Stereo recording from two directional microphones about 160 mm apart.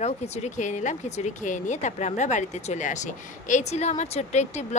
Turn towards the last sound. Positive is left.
turn(degrees=45)  # may be behind; listen again after turning